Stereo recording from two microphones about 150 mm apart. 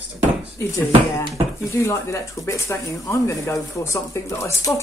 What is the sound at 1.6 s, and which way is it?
Speech, 20° left (ahead or behind).